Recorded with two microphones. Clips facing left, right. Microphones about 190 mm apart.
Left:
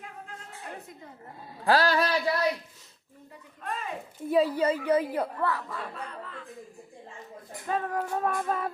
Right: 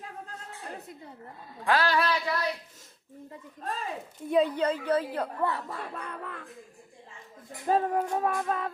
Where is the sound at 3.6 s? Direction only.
35° right (ahead or behind).